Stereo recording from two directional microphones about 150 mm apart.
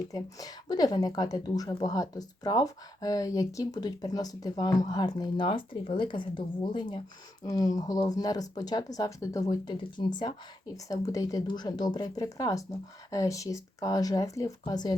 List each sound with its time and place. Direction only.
0.1 s speech: 25° left (ahead or behind)